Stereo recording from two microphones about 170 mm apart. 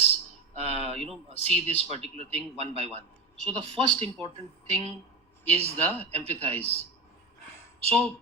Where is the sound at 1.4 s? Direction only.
40° left (ahead or behind).